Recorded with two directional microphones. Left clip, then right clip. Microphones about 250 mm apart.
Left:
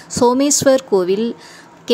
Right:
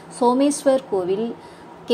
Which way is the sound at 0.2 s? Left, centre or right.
Left.